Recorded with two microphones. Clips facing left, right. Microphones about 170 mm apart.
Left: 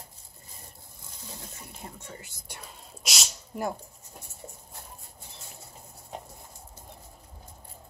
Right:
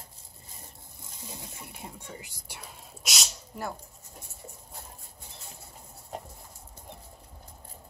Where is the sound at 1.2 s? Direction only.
10° right (ahead or behind).